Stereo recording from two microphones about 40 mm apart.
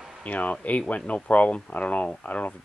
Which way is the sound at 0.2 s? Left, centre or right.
Left.